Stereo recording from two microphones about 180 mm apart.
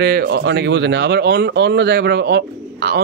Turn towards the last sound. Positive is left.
turn(degrees=-65)  # may be behind; listen again after turning